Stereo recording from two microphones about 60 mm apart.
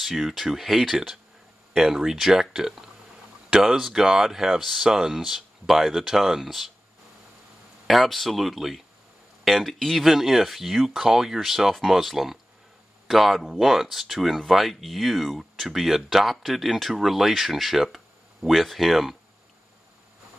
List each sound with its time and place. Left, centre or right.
0.0 s speech: centre
7.8 s speech: centre